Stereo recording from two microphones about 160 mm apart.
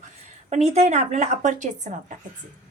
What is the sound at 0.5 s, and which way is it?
A woman's voice, 45° right (ahead or behind).